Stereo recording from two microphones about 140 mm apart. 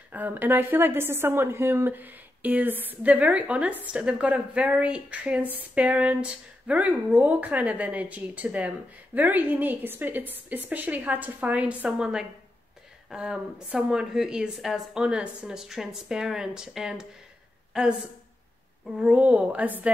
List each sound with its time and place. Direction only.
0.1 s a woman's voice: 15° right (ahead or behind)
18.9 s a woman's voice: 10° right (ahead or behind)